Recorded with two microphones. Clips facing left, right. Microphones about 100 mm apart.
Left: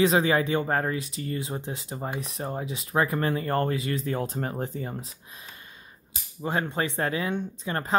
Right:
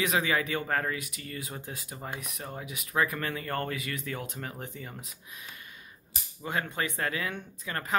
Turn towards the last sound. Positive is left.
turn(degrees=30)  # may be behind; listen again after turning